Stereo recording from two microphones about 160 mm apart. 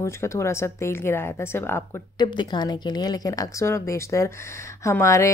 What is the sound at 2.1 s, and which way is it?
Speech, 30° left (ahead or behind).